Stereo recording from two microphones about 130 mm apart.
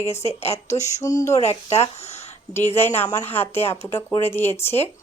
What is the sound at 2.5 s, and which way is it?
Speech, 20° left (ahead or behind).